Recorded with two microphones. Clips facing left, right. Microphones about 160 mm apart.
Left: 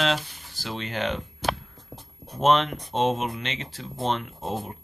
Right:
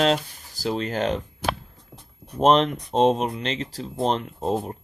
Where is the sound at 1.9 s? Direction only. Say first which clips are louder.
Left 4 dB; 35° left (ahead or behind).